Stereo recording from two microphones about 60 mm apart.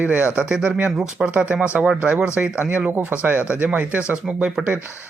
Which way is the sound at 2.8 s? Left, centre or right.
Right.